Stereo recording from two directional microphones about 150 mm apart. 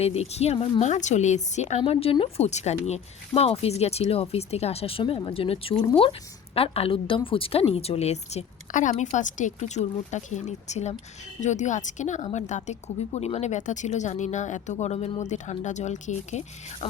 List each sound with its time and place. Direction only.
0.0 s a woman's voice: 45° left (ahead or behind)